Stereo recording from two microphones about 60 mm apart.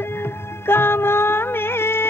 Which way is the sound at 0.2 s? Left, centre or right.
Left.